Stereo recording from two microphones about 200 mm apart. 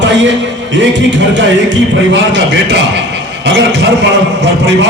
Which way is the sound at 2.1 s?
65° right (ahead or behind).